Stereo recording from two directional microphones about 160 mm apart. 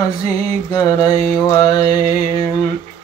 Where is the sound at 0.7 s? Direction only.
25° left (ahead or behind).